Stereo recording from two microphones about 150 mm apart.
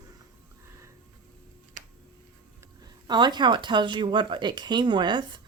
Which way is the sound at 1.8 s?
60° right (ahead or behind).